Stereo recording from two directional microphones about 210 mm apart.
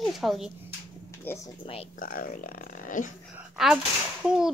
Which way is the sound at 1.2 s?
10° left (ahead or behind).